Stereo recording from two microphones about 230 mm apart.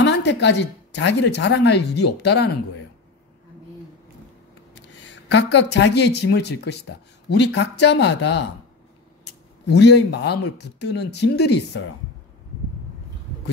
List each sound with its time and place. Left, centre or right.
0.0 s a woman's voice: left
4.7 s a woman's voice: left
9.7 s a woman's voice: left